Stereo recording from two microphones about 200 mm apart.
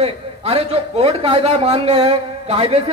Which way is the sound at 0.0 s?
30° right (ahead or behind).